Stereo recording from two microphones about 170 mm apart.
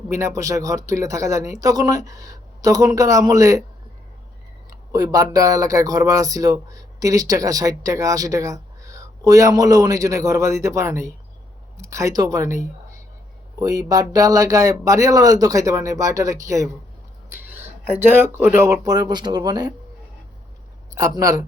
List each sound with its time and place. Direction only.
0.1 s speech: 15° right (ahead or behind)
4.9 s speech: 20° right (ahead or behind)
12.5 s speech: 45° left (ahead or behind)
13.6 s speech: 20° right (ahead or behind)
17.3 s a sound: 10° right (ahead or behind)
18.1 s speech: 10° right (ahead or behind)
20.9 s speech: 20° right (ahead or behind)